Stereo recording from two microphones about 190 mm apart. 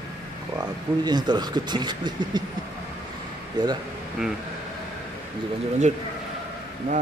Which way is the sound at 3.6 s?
25° right (ahead or behind).